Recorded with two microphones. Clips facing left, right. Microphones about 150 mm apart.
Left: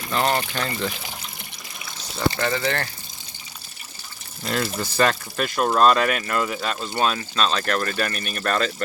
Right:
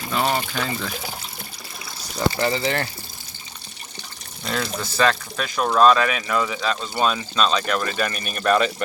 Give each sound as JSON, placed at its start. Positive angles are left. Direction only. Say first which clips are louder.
{"t": 0.1, "sound": "speech", "louder": "left 1 dB", "side_deg": -5}
{"t": 2.1, "sound": "speech", "louder": "right 1 dB", "side_deg": -25}
{"t": 4.4, "sound": "speech", "louder": "left 1 dB", "side_deg": 5}